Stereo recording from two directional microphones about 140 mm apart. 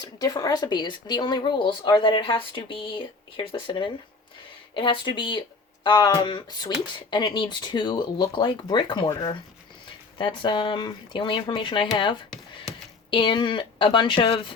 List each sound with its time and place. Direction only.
0.0 s speech: 25° left (ahead or behind)